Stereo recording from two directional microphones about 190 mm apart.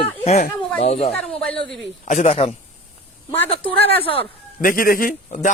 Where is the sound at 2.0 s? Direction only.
35° left (ahead or behind).